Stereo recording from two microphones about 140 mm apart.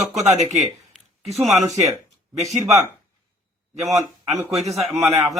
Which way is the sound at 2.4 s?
55° right (ahead or behind).